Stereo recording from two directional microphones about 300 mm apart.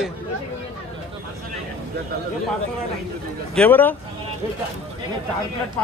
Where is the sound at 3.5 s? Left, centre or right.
Centre.